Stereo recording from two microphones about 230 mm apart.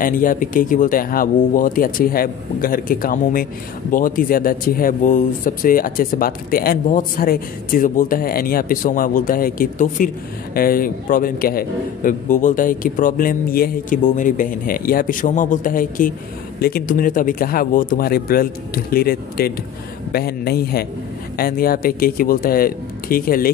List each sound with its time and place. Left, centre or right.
0.0 s speech: left